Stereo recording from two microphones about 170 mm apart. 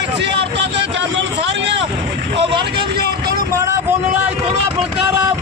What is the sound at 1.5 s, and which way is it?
Vehicle, 90° right.